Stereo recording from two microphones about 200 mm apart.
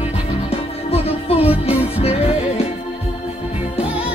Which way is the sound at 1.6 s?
30° left (ahead or behind).